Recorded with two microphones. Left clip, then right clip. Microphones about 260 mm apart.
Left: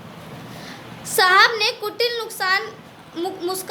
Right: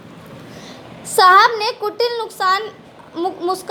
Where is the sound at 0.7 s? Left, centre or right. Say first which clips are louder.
Right 1 dB; right.